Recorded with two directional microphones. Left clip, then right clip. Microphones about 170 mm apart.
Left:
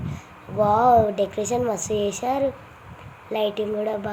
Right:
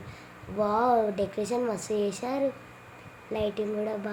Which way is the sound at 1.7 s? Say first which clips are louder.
Left 5 dB; 15° right (ahead or behind).